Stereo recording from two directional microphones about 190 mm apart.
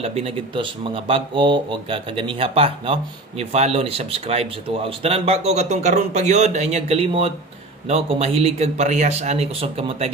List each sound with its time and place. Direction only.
0.0 s speech: 35° right (ahead or behind)